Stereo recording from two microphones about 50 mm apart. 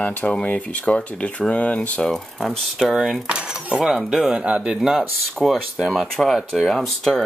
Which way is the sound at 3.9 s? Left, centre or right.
Centre.